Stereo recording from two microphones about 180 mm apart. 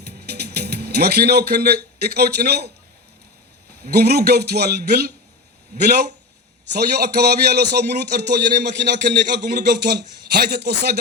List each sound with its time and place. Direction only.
0.0 s speech: 60° right (ahead or behind)
3.8 s a man's voice: 60° right (ahead or behind)